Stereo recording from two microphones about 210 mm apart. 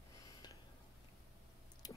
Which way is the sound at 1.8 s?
20° left (ahead or behind).